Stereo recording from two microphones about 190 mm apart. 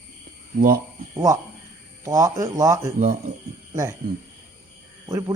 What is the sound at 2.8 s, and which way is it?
Speech, 45° right (ahead or behind).